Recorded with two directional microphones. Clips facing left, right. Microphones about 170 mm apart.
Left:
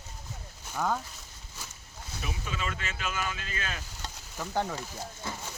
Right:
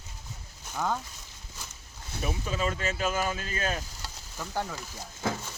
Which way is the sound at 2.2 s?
35° right (ahead or behind).